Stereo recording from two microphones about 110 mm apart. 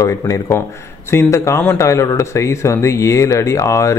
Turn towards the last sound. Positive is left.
turn(degrees=30)  # may be behind; listen again after turning